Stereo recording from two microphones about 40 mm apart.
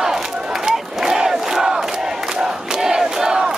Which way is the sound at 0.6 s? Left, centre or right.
Centre.